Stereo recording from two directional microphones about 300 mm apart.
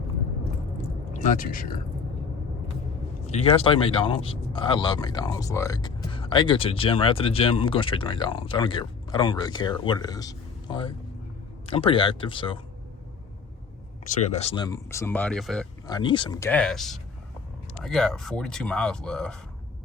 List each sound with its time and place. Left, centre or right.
1.1 s speech: left
3.2 s speech: centre
14.0 s speech: left; by 15.6 s centre
15.9 s speech: centre